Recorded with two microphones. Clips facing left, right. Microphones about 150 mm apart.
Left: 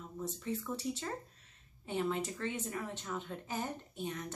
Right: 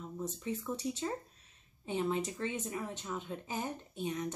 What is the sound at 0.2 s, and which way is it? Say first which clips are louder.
Speech: even; 15° right (ahead or behind).